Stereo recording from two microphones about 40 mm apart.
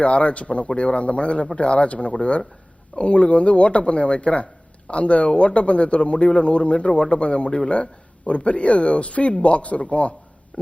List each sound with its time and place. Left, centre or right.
0.0 s a man's voice: left
10.5 s stomach rumble: left